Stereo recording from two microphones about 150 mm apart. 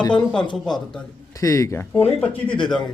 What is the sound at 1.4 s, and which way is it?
A man's voice, 20° left (ahead or behind).